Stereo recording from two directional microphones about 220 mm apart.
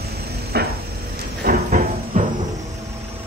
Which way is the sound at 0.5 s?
45° right (ahead or behind).